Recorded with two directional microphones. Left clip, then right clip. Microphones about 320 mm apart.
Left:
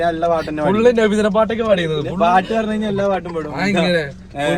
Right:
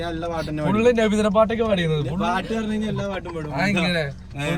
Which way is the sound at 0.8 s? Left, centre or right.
Centre.